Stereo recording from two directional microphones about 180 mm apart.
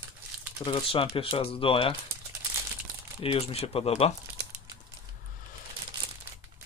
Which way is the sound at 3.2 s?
30° left (ahead or behind).